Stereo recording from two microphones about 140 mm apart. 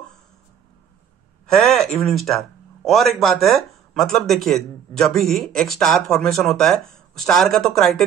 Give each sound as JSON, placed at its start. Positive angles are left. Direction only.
{"t": 1.5, "sound": "a man's voice", "side_deg": 0}